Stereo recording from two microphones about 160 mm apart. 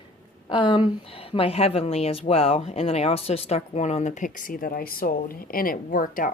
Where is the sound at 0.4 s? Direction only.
30° left (ahead or behind).